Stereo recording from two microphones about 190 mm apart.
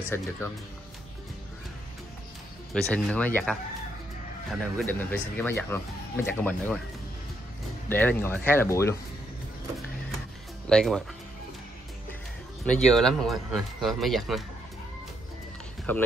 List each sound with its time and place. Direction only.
2.7 s speech: 5° left (ahead or behind)
7.9 s speech: 10° left (ahead or behind)
10.7 s speech: 5° left (ahead or behind)
12.6 s speech: 5° left (ahead or behind)
15.9 s speech: 10° left (ahead or behind)